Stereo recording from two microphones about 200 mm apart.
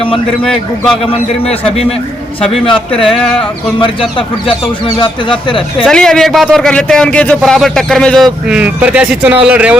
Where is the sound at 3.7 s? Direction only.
25° left (ahead or behind).